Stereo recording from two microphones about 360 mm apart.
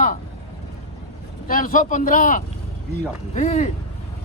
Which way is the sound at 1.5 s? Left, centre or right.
Left.